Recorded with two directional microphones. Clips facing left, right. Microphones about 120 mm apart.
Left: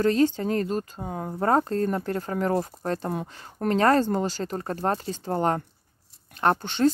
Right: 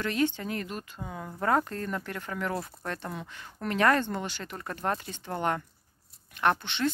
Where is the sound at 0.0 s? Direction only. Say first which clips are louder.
Left 7 dB; 40° left (ahead or behind).